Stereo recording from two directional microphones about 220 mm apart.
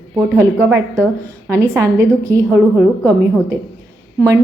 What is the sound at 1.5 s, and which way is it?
A woman's voice, 15° right (ahead or behind).